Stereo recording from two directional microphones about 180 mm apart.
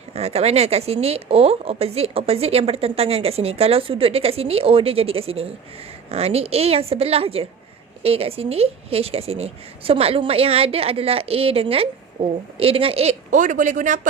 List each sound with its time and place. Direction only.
0.1 s speech: 35° right (ahead or behind)